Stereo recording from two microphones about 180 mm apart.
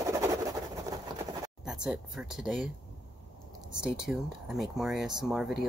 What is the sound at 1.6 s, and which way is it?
Speech, 5° right (ahead or behind).